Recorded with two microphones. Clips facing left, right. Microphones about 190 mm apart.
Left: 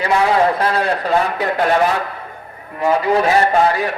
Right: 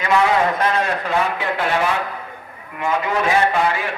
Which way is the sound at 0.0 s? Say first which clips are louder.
Left 2 dB; 35° left (ahead or behind).